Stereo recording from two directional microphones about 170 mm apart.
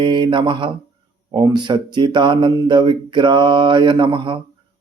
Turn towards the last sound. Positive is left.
turn(degrees=-30)  # may be behind; listen again after turning